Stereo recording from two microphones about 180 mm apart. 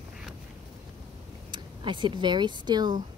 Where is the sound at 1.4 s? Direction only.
25° right (ahead or behind).